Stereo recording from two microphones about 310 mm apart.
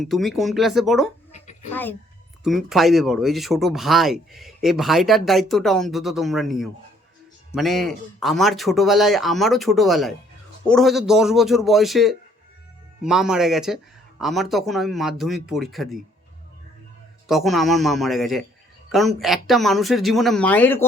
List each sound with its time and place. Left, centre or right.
0.0 s speech: centre
1.3 s a sound: left
1.7 s a woman's voice: centre
17.2 s speech: centre